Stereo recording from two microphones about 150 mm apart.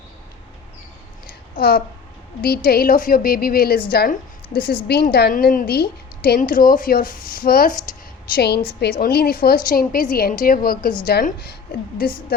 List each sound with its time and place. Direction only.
1.5 s a woman's voice: 80° left
2.4 s a woman's voice: 90° left
8.4 s a woman's voice: 90° left